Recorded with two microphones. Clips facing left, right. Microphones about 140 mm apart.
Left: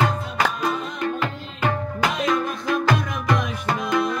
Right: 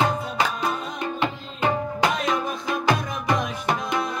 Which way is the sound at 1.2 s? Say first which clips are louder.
Right 1 dB; 25° right (ahead or behind).